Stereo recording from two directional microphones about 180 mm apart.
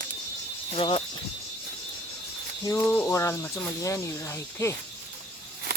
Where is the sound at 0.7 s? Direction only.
30° left (ahead or behind).